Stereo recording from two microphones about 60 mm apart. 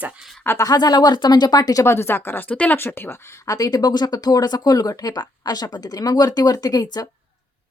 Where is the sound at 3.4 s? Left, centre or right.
Left.